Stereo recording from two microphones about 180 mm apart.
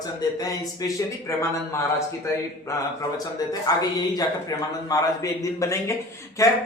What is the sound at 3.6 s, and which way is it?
Speech, 20° left (ahead or behind).